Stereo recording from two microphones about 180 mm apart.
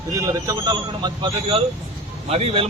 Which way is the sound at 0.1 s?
20° right (ahead or behind).